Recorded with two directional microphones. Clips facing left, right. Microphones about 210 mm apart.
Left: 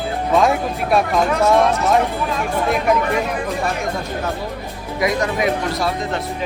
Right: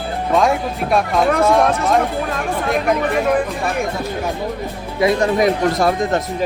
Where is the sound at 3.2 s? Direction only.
55° right (ahead or behind).